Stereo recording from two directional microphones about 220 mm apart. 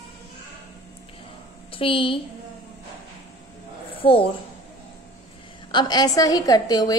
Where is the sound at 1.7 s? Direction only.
25° left (ahead or behind).